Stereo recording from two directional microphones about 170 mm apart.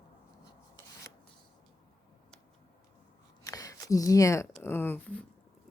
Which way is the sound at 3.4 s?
20° left (ahead or behind).